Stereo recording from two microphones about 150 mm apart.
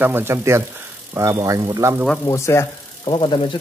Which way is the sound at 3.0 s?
35° left (ahead or behind).